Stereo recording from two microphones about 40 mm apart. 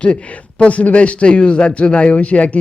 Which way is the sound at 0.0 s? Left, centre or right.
Left.